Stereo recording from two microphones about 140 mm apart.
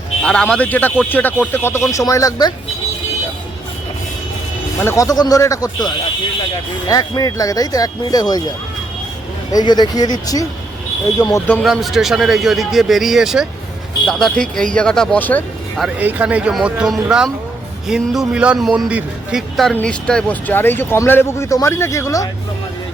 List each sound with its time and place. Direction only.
0.2 s speech: 5° left (ahead or behind); by 2.5 s 25° left (ahead or behind)
4.8 s speech: 20° left (ahead or behind)
9.5 s speech: 30° left (ahead or behind)
11.6 s a man's voice: centre (ahead or behind)
16.0 s a man's voice: 10° right (ahead or behind); by 22.3 s 20° left (ahead or behind)